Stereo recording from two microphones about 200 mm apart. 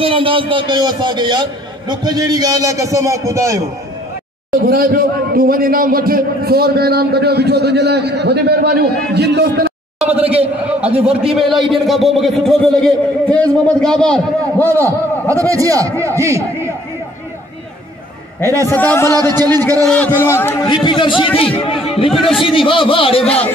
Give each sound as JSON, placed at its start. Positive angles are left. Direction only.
{"t": 0.0, "sound": "a man's voice", "side_deg": -25}
{"t": 4.5, "sound": "a man's voice", "side_deg": -45}
{"t": 9.9, "sound": "a sound", "side_deg": -30}
{"t": 10.8, "sound": "a man's voice", "side_deg": -5}
{"t": 14.9, "sound": "speech", "side_deg": -15}
{"t": 18.4, "sound": "speech", "side_deg": -15}
{"t": 18.7, "sound": "a man's voice", "side_deg": 10}